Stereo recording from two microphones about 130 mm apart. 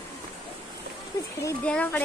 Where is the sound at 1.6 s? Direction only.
10° left (ahead or behind).